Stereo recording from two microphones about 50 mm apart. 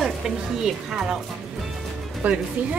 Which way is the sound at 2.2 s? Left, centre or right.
Right.